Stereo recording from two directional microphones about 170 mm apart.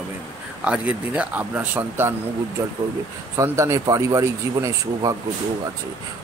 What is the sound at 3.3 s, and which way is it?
Speech, 15° right (ahead or behind).